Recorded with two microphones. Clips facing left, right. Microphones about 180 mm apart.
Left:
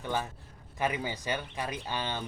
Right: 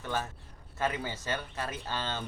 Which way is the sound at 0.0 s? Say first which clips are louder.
Left 1 dB; 15° left (ahead or behind).